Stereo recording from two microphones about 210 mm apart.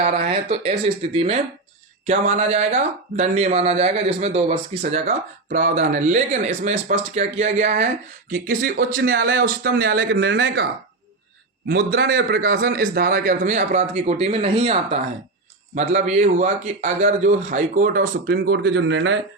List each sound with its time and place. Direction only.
0.0 s speech: 30° right (ahead or behind); by 10.7 s 50° right (ahead or behind)
11.7 s speech: 50° right (ahead or behind)